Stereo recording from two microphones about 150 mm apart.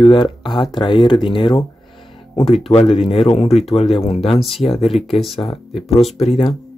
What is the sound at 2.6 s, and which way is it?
Speech, 40° left (ahead or behind).